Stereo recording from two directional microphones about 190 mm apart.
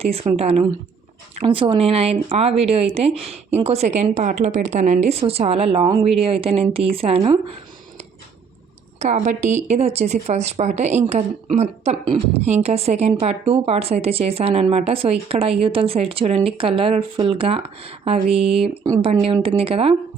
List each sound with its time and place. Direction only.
0.0 s speech: 30° right (ahead or behind)
9.0 s speech: 40° right (ahead or behind)